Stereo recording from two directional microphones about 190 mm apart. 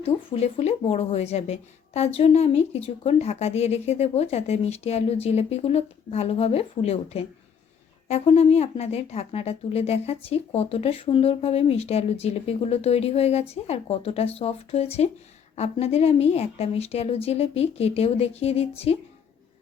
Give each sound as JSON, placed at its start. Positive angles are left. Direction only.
{"t": 0.0, "sound": "speech", "side_deg": 35}